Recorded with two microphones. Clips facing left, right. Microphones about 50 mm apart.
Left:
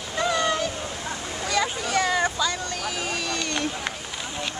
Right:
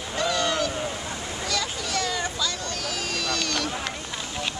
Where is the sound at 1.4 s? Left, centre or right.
Centre.